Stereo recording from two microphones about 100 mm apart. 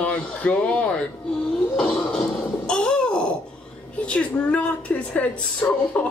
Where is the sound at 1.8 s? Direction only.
10° left (ahead or behind).